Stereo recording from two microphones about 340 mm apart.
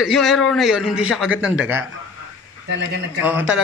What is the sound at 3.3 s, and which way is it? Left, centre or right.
Speech, centre.